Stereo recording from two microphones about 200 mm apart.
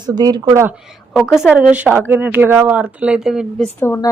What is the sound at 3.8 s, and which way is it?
Speech, 10° left (ahead or behind).